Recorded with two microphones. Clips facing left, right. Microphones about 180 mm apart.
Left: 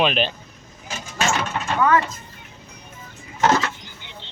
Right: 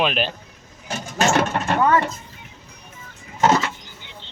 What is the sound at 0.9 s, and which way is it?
Mechanisms, 60° right (ahead or behind).